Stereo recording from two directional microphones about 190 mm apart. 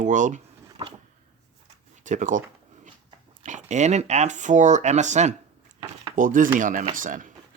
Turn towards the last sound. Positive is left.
turn(degrees=-45)  # may be behind; listen again after turning